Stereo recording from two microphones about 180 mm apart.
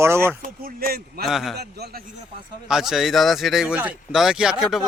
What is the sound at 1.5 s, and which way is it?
Speech, 65° right (ahead or behind).